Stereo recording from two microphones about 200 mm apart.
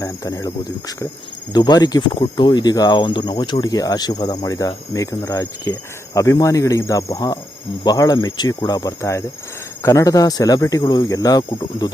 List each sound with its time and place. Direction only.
0.0 s speech: 15° left (ahead or behind)